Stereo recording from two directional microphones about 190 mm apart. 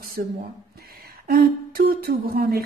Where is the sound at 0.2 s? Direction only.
45° right (ahead or behind).